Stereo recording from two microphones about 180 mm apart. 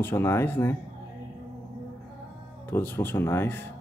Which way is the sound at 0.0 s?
15° left (ahead or behind).